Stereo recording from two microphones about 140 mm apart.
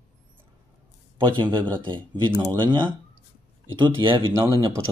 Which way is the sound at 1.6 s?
10° left (ahead or behind).